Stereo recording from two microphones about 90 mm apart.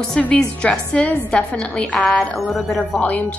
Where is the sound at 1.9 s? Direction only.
Centre (ahead or behind).